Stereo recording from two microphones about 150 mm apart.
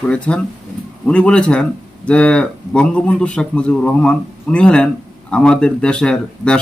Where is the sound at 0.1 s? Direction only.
5° left (ahead or behind).